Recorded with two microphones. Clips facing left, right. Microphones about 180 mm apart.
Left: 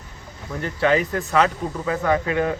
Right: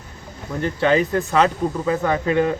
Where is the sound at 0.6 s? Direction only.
25° right (ahead or behind).